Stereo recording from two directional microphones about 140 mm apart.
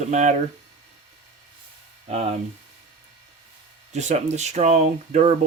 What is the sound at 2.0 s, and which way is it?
Speech, 45° right (ahead or behind).